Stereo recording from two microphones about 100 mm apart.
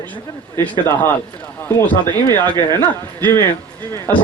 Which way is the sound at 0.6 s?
15° left (ahead or behind).